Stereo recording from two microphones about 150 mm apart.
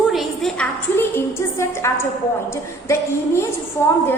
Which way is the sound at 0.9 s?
15° left (ahead or behind).